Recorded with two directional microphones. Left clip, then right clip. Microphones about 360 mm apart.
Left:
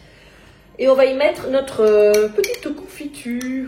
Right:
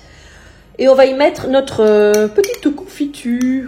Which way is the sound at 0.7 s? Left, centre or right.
Right.